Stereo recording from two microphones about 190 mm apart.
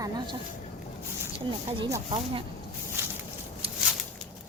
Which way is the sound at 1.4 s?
25° right (ahead or behind).